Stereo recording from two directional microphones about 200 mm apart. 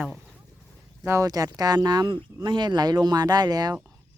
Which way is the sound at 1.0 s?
15° right (ahead or behind).